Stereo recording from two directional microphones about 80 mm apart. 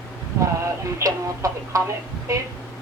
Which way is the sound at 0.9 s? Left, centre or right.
Right.